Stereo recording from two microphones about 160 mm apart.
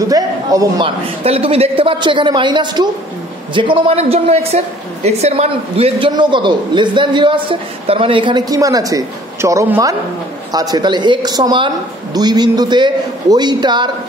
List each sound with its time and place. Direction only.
0.1 s a man's voice: 20° right (ahead or behind)
0.8 s a man's voice: 35° right (ahead or behind)